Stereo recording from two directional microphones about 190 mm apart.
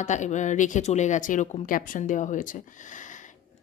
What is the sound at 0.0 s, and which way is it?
Speech, 40° left (ahead or behind).